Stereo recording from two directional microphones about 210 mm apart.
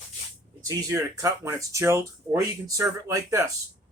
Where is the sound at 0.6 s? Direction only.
15° right (ahead or behind).